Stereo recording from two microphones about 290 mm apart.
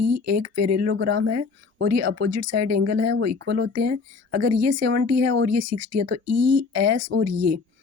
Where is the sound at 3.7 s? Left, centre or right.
Right.